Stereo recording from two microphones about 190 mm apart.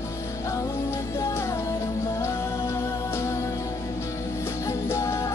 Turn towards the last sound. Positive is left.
turn(degrees=15)  # may be behind; listen again after turning